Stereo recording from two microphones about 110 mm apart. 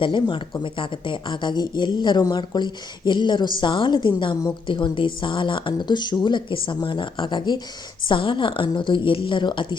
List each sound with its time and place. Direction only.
0.0 s speech: 50° left (ahead or behind)